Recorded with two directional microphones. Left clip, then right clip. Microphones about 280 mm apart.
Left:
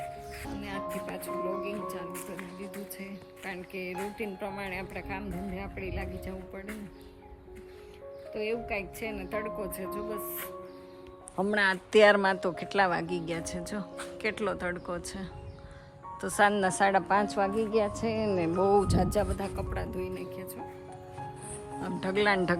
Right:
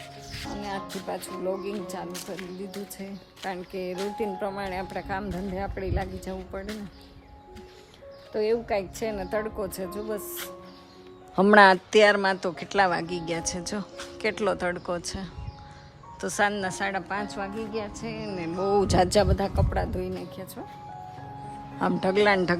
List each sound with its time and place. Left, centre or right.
0.3 s music: centre
1.6 s speech: centre
3.4 s speech: centre
8.3 s speech: centre
11.5 s speech: centre
11.9 s a woman's voice: centre
18.9 s speech: right
19.3 s speech: centre
22.0 s a woman's voice: centre